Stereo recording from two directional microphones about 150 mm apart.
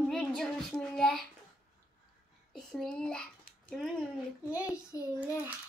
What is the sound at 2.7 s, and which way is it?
Child singing, 5° left (ahead or behind).